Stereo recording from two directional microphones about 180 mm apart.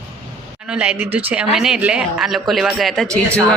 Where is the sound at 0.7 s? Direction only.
5° right (ahead or behind).